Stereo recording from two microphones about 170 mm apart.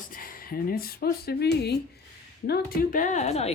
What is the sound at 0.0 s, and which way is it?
Speech, 55° left (ahead or behind).